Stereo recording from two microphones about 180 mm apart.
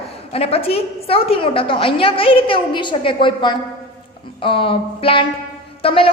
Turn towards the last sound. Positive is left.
turn(degrees=30)  # may be behind; listen again after turning